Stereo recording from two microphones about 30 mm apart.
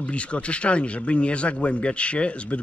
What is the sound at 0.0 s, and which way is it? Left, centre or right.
Speech, left.